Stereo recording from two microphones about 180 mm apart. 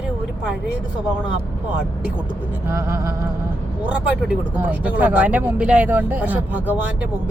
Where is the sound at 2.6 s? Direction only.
15° right (ahead or behind).